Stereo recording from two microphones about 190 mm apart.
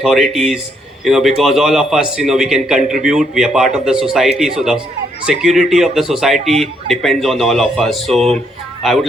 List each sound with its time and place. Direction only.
0.0 s a man's voice: centre (ahead or behind)
6.4 s a man's voice: 35° right (ahead or behind)
6.9 s a man's voice: centre (ahead or behind)